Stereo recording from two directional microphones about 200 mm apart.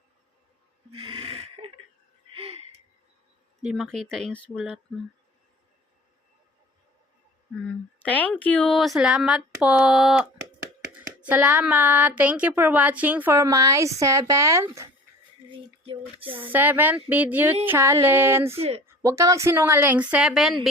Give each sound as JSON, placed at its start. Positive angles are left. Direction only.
{"t": 0.9, "sound": "a sound", "side_deg": -30}
{"t": 3.6, "sound": "speech", "side_deg": -5}
{"t": 7.5, "sound": "speech", "side_deg": 5}
{"t": 11.3, "sound": "speech", "side_deg": -10}
{"t": 16.2, "sound": "speech", "side_deg": -25}
{"t": 16.5, "sound": "speech", "side_deg": -10}
{"t": 18.5, "sound": "speech", "side_deg": -30}
{"t": 18.9, "sound": "speech", "side_deg": -15}